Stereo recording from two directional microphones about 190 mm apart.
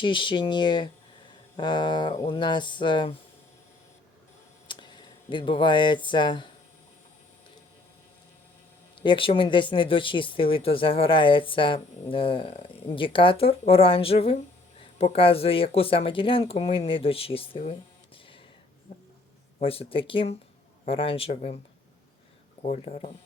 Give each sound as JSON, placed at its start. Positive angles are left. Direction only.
{"t": 0.0, "sound": "speech", "side_deg": 25}
{"t": 4.7, "sound": "speech", "side_deg": 25}
{"t": 9.0, "sound": "speech", "side_deg": 25}
{"t": 19.5, "sound": "speech", "side_deg": 30}
{"t": 22.6, "sound": "speech", "side_deg": 35}